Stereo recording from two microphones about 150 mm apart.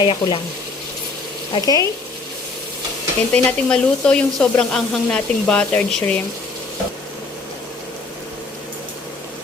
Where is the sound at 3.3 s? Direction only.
10° left (ahead or behind).